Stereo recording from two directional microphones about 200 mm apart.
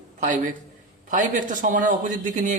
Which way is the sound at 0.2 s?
40° right (ahead or behind).